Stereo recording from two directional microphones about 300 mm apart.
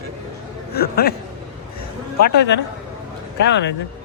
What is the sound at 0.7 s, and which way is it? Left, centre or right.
Speech, left.